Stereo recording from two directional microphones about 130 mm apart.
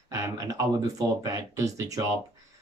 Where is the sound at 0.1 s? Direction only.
25° right (ahead or behind).